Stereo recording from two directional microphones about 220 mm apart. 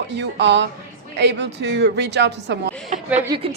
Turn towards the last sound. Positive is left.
turn(degrees=-20)  # may be behind; listen again after turning